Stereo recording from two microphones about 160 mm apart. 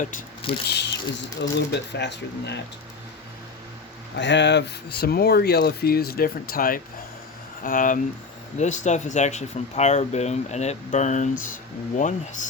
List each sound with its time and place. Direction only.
0.7 s speech: 90° left
4.2 s speech: 90° left; by 12.5 s 50° left (ahead or behind)